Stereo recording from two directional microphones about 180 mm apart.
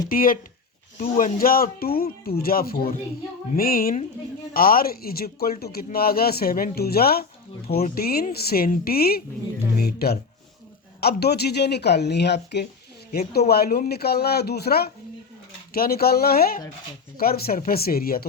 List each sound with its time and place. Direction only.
0.1 s a woman's voice: 50° left (ahead or behind); by 12.6 s 70° left (ahead or behind)
13.1 s speech: 55° left (ahead or behind)